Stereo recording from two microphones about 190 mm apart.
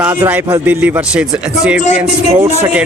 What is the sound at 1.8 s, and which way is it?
Speech, 40° left (ahead or behind).